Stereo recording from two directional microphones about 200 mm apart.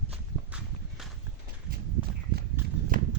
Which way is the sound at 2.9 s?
45° right (ahead or behind).